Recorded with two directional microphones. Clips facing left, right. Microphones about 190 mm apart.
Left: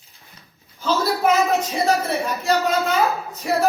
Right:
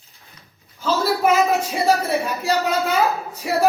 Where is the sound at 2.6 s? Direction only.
Centre (ahead or behind).